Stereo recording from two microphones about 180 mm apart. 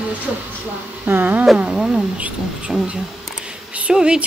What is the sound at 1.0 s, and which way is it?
Speech, 10° right (ahead or behind).